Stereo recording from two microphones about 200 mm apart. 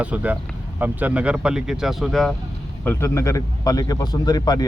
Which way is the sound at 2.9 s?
15° left (ahead or behind).